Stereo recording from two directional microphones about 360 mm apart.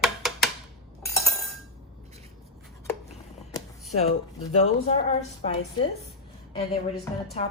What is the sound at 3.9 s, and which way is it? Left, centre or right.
Speech, centre.